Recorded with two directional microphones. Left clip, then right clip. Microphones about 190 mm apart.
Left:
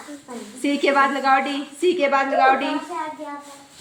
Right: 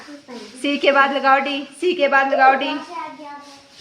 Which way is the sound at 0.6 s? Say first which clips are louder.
Right 3 dB; 25° right (ahead or behind).